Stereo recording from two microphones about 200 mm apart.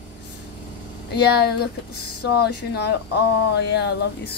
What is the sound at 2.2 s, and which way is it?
Speech, 55° left (ahead or behind).